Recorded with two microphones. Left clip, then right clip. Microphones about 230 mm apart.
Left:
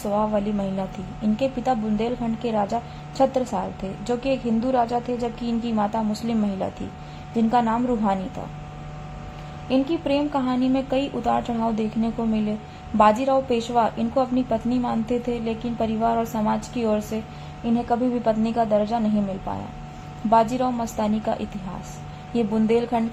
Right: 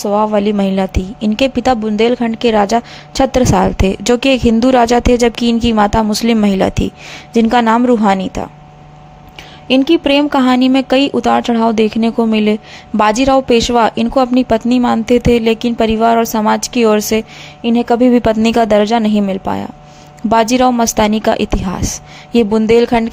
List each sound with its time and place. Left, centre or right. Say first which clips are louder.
0.0 s a woman's voice: right 11 dB; right
9.6 s a woman's voice: right 12 dB; right